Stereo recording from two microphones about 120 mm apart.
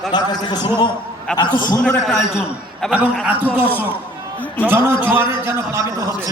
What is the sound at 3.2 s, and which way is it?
A man's voice, 15° right (ahead or behind).